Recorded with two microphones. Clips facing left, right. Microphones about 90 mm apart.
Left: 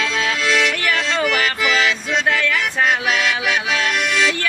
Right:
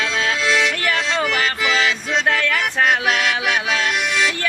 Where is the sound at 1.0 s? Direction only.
20° right (ahead or behind).